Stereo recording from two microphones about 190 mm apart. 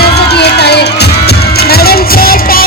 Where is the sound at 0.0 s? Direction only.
60° left (ahead or behind).